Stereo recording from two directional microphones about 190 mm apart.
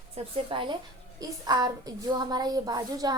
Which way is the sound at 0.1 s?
25° right (ahead or behind).